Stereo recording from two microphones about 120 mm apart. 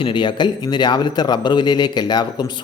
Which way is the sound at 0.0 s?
40° left (ahead or behind).